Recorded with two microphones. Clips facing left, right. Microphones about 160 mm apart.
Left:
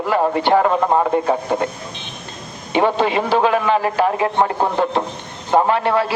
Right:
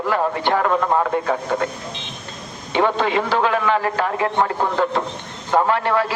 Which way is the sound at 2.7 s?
20° left (ahead or behind).